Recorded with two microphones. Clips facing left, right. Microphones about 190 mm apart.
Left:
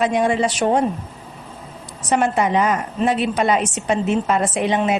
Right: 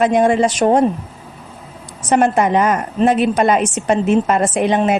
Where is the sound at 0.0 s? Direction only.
50° right (ahead or behind).